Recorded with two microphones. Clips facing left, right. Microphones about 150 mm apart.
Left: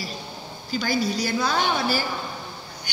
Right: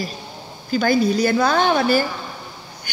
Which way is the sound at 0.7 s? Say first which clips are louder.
Right 7 dB; 55° right (ahead or behind).